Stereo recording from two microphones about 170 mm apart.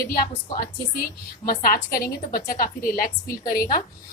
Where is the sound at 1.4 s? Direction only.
60° left (ahead or behind).